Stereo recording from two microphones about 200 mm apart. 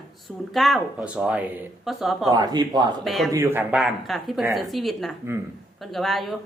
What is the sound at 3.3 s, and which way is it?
A woman's voice, 15° right (ahead or behind).